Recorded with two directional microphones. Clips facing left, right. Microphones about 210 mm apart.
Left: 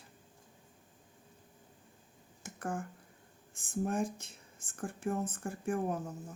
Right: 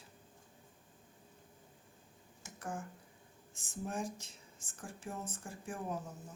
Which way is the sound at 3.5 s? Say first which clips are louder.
Left 7 dB; 55° left (ahead or behind).